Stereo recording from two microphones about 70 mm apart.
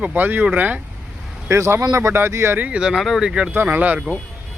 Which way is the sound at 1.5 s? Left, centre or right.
Right.